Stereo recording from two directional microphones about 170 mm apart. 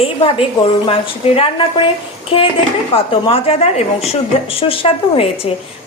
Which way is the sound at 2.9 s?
35° left (ahead or behind).